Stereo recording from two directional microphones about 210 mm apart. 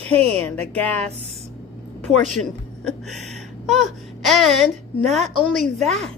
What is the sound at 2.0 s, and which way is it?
Speech, centre (ahead or behind).